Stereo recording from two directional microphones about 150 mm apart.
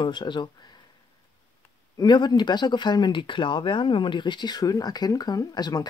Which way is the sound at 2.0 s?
30° left (ahead or behind).